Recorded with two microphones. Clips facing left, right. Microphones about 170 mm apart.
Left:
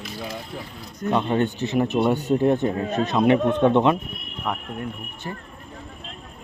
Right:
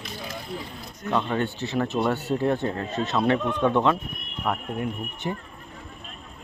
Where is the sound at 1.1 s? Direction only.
20° left (ahead or behind).